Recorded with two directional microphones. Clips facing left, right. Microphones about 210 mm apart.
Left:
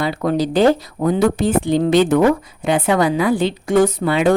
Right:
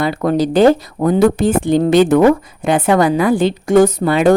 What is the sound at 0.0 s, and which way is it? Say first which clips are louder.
A woman's voice: right 3 dB; 50° right (ahead or behind).